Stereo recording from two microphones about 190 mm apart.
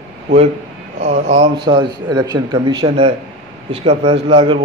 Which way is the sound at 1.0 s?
40° right (ahead or behind).